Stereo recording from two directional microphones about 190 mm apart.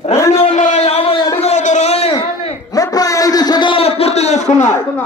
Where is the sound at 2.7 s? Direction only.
20° left (ahead or behind); by 4.7 s 40° left (ahead or behind).